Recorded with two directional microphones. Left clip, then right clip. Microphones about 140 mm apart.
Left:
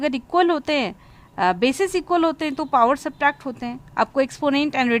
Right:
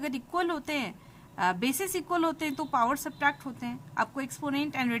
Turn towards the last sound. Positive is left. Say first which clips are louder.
# left 11 dB
turn(degrees=65)  # may be behind; listen again after turning